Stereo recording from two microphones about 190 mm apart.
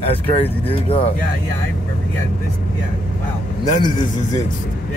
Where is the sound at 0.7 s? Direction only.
30° left (ahead or behind).